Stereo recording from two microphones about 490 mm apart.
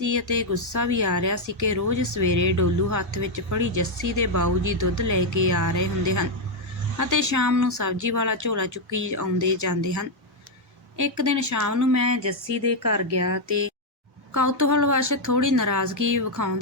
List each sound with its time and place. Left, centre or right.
0.0 s speech: right